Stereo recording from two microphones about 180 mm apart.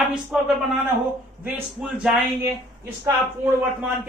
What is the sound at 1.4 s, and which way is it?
Speech, 5° right (ahead or behind).